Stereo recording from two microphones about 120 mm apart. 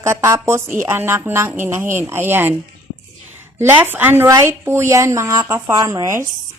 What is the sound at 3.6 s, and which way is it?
Speech, 15° right (ahead or behind).